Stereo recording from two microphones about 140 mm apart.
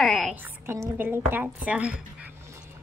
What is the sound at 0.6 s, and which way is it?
A woman's voice, 15° right (ahead or behind).